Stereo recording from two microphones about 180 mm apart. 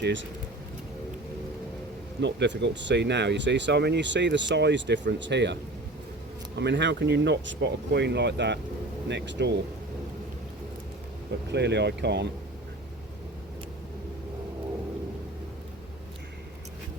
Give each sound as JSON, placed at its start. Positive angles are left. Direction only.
{"t": 0.0, "sound": "speech", "side_deg": -90}
{"t": 2.2, "sound": "speech", "side_deg": -75}
{"t": 6.6, "sound": "speech", "side_deg": -75}
{"t": 11.4, "sound": "speech", "side_deg": -70}